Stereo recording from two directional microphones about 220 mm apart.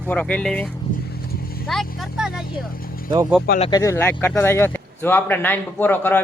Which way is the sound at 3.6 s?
15° left (ahead or behind).